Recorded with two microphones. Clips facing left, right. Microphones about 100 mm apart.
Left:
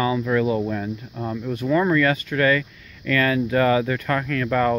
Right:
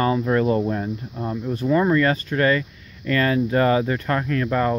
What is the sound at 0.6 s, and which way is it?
Speech, 25° right (ahead or behind).